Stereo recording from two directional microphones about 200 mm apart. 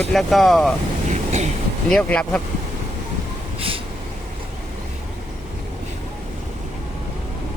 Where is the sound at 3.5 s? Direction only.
25° right (ahead or behind).